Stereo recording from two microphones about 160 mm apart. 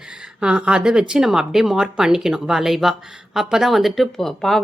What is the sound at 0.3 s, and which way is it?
A woman's voice, 5° right (ahead or behind).